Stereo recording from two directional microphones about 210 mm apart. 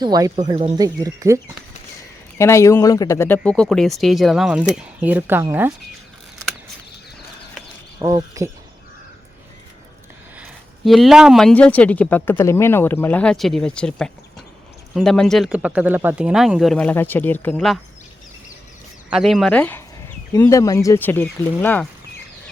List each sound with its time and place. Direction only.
0.0 s speech: 20° right (ahead or behind)
2.4 s speech: 15° left (ahead or behind); by 5.7 s 10° right (ahead or behind)
7.9 s speech: 15° right (ahead or behind)
10.3 s speech: 5° right (ahead or behind)
19.1 s speech: centre (ahead or behind)